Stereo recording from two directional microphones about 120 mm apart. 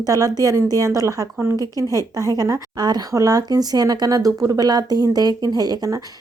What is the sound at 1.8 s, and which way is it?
A woman's voice, 30° right (ahead or behind).